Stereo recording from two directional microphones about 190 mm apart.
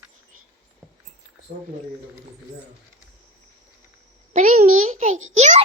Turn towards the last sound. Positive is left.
turn(degrees=-35)  # may be behind; listen again after turning